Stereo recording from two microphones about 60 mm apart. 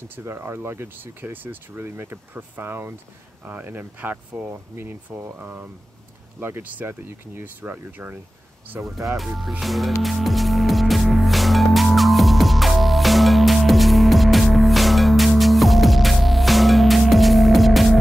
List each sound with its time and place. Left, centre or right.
0.1 s speech: right
8.8 s speech: centre
10.0 s music: centre